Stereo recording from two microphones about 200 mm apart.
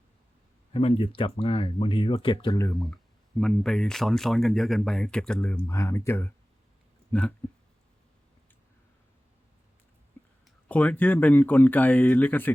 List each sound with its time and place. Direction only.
0.7 s speech: 30° left (ahead or behind)
3.4 s speech: centre (ahead or behind)
10.4 s speech: 5° left (ahead or behind)